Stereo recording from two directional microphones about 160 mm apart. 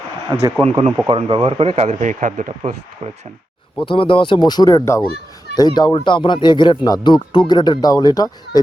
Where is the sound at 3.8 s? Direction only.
30° left (ahead or behind).